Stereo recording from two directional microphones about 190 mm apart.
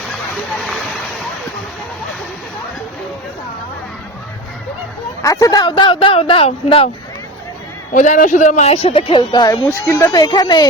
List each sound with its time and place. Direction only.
5.2 s speech: 20° left (ahead or behind)
7.9 s speech: 40° left (ahead or behind); by 10.7 s 20° left (ahead or behind)